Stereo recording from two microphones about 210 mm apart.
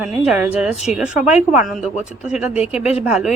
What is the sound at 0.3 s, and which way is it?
Speech, 5° right (ahead or behind).